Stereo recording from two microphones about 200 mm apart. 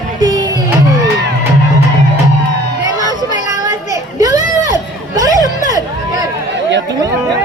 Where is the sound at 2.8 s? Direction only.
20° right (ahead or behind).